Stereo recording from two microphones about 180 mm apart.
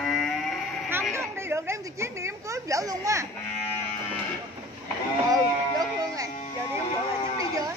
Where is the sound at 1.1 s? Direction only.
15° right (ahead or behind).